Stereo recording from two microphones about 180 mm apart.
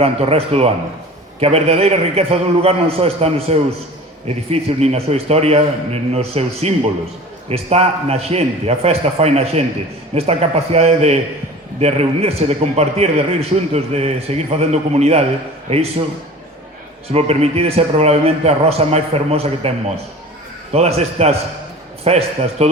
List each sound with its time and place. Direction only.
0.0 s a man's voice: 35° right (ahead or behind)
17.1 s a man's voice: 35° right (ahead or behind)
20.7 s a man's voice: 35° right (ahead or behind)